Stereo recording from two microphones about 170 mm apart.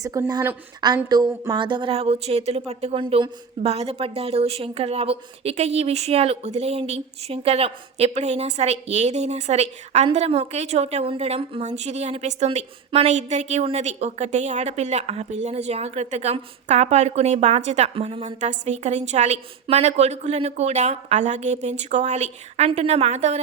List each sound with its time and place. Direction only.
0.0 s a woman's voice: 20° right (ahead or behind); by 23.4 s 40° right (ahead or behind)